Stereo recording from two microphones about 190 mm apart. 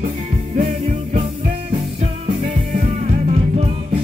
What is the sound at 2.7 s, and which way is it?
Music, 35° right (ahead or behind).